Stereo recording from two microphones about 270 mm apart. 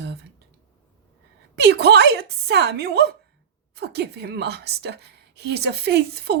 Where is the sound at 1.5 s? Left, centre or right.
Right.